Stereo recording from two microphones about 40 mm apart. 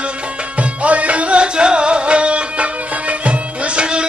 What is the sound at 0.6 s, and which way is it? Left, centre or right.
Music, right.